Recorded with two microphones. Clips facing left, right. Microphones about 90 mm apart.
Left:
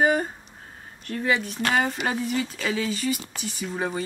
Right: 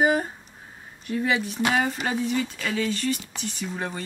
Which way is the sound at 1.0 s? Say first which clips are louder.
Even; 5° right (ahead or behind).